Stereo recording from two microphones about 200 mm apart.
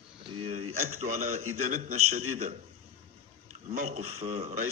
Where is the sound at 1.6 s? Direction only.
40° right (ahead or behind).